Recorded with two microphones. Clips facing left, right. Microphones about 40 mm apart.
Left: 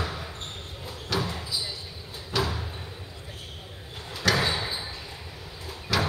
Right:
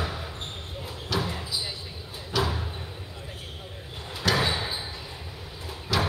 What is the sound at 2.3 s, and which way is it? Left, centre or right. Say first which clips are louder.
Slam: right 1 dB; centre.